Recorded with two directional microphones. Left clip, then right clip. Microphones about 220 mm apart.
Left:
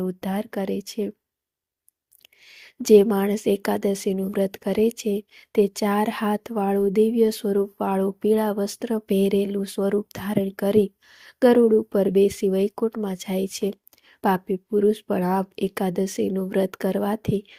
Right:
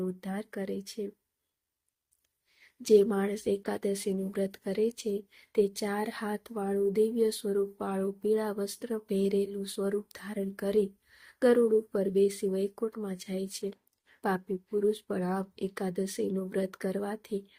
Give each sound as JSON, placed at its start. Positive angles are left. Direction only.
{"t": 0.2, "sound": "a woman's voice", "side_deg": 30}
{"t": 2.6, "sound": "a woman's voice", "side_deg": 30}